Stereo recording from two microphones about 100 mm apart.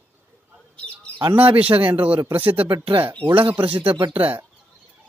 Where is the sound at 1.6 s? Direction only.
15° right (ahead or behind).